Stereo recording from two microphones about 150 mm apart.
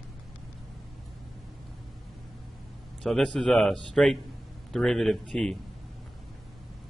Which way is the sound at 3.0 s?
5° left (ahead or behind).